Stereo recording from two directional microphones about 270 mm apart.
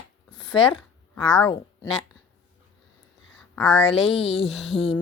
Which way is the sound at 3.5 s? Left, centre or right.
Centre.